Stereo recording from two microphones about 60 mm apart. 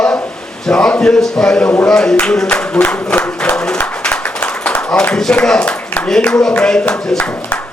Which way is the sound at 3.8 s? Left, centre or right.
Left.